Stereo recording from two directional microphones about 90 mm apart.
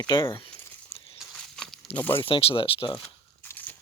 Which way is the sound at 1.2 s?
5° left (ahead or behind).